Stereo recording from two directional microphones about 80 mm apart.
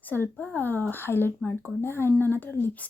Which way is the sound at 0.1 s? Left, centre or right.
Left.